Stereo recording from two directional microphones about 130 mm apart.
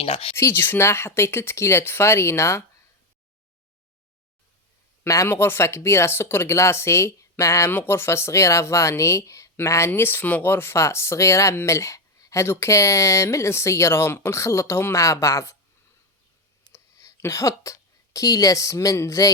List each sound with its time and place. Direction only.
0.0 s speech: 50° left (ahead or behind)
0.3 s speech: 20° left (ahead or behind)
5.0 s speech: 20° left (ahead or behind)
16.6 s speech: 25° left (ahead or behind)